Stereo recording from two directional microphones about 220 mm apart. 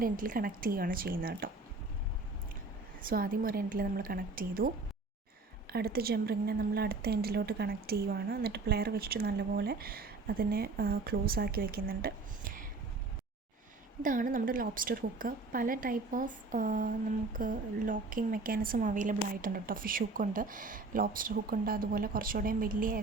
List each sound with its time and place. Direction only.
0.0 s a woman's voice: 40° right (ahead or behind)
3.1 s a woman's voice: 40° right (ahead or behind)
5.7 s a woman's voice: 45° right (ahead or behind)
14.0 s a woman's voice: 35° right (ahead or behind)